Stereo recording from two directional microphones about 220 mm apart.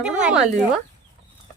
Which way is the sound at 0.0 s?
5° right (ahead or behind).